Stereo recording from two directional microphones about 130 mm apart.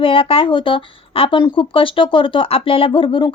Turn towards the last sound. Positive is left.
turn(degrees=40)  # may be behind; listen again after turning